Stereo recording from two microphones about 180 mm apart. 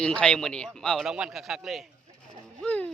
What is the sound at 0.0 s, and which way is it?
A man's voice, 5° left (ahead or behind).